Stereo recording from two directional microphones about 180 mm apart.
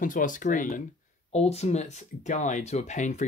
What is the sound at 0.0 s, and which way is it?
Speech, 45° left (ahead or behind).